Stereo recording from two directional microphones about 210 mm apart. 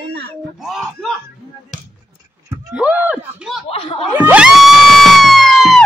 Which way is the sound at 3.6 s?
25° left (ahead or behind).